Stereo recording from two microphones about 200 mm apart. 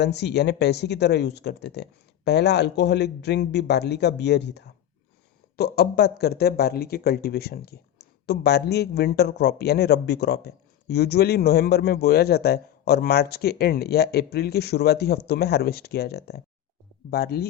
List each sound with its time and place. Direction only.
0.0 s speech: 60° left (ahead or behind)